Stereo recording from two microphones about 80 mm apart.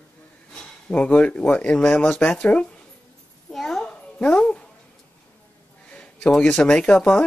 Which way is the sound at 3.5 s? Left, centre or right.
Centre.